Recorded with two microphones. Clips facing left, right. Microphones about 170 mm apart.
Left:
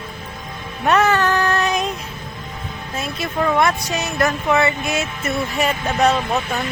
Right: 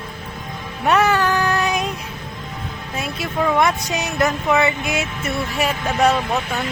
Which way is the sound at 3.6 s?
15° right (ahead or behind).